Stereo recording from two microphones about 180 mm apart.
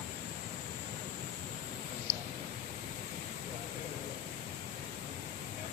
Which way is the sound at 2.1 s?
70° right (ahead or behind).